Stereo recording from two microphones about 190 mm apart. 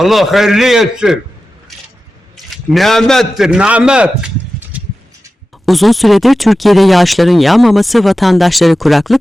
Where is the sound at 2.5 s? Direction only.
Centre (ahead or behind).